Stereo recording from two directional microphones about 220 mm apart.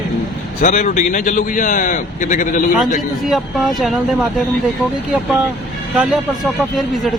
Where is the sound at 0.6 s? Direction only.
35° left (ahead or behind).